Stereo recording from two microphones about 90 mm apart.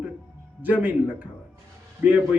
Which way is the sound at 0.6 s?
20° right (ahead or behind).